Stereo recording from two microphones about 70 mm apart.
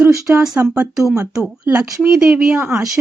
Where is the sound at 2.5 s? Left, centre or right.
Right.